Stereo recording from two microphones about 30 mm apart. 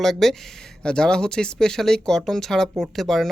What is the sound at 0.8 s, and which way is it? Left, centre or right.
Speech, left.